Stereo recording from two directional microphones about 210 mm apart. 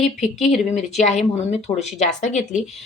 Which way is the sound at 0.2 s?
35° left (ahead or behind).